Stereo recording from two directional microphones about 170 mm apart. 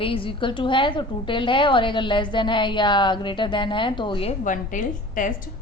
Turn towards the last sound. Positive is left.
turn(degrees=50)  # may be behind; listen again after turning